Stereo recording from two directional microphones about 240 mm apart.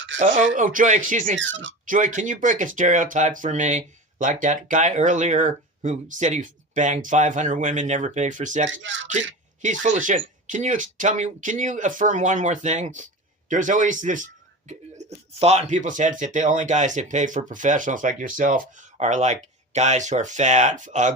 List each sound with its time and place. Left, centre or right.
0.1 s speech: right
0.5 s speech: right
1.4 s speech: right
1.8 s speech: right
8.7 s speech: right
9.8 s speech: right